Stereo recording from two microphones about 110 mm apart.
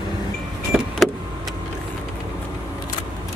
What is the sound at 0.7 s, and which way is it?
Vehicle, 5° right (ahead or behind).